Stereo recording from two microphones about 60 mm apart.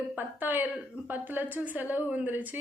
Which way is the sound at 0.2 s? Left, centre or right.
Right.